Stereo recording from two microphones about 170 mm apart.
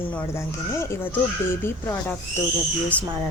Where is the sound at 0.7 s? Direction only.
15° left (ahead or behind).